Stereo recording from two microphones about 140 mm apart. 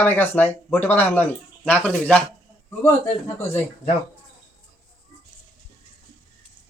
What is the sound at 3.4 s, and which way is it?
Speech, 15° left (ahead or behind).